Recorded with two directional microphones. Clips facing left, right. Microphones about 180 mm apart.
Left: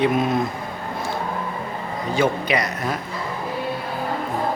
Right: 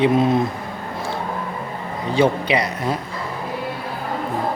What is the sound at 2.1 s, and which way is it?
Speech, 30° right (ahead or behind).